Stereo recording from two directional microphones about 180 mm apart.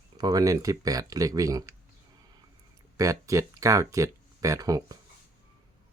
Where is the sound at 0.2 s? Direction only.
20° right (ahead or behind).